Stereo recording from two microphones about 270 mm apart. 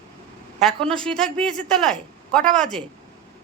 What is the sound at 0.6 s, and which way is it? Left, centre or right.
A man's voice, centre.